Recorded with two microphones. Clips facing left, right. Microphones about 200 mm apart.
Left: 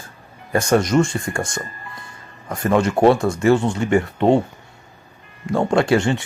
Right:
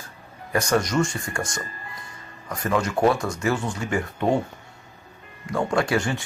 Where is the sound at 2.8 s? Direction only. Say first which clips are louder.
Left 6 dB; 30° left (ahead or behind).